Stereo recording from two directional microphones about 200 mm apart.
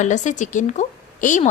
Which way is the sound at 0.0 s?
40° left (ahead or behind).